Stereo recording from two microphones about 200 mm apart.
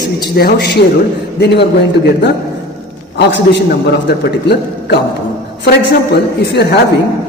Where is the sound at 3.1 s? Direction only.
60° left (ahead or behind).